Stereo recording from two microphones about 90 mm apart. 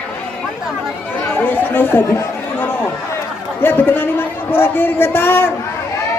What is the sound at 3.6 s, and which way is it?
Speech, 20° left (ahead or behind).